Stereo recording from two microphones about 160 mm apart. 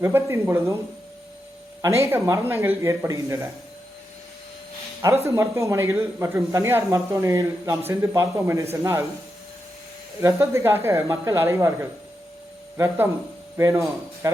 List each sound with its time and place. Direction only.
0.0 s a man's voice: 15° right (ahead or behind)
1.8 s a man's voice: 20° right (ahead or behind)
5.0 s a man's voice: 20° right (ahead or behind)
10.2 s a man's voice: 20° right (ahead or behind)
12.7 s a man's voice: 15° right (ahead or behind)